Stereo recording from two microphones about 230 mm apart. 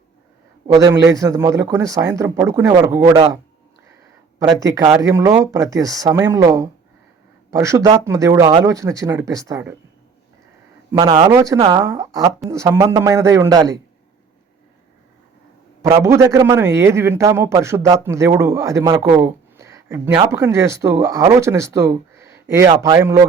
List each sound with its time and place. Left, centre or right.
0.7 s a man's voice: centre
4.4 s a man's voice: centre
10.9 s a man's voice: centre
15.9 s a man's voice: centre
19.1 s a sound: centre
20.1 s a man's voice: centre